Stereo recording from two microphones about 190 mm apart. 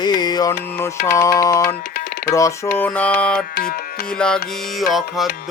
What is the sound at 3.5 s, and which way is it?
Music, 50° left (ahead or behind).